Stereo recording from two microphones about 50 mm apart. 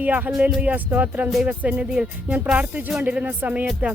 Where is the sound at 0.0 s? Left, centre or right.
Right.